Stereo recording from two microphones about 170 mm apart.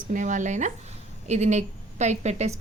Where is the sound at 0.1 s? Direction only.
50° right (ahead or behind).